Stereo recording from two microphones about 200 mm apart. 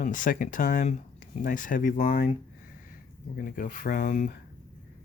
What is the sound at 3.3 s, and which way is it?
Speech, 45° left (ahead or behind).